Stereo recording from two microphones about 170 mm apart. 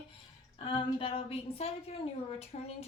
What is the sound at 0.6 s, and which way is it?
A woman's voice, 35° left (ahead or behind).